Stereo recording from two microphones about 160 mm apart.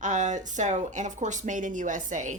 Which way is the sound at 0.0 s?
50° right (ahead or behind).